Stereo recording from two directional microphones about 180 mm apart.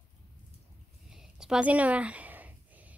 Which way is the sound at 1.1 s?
5° right (ahead or behind).